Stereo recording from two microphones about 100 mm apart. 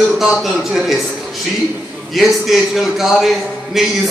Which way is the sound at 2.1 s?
Centre (ahead or behind).